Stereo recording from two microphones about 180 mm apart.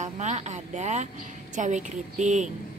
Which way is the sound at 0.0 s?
40° right (ahead or behind).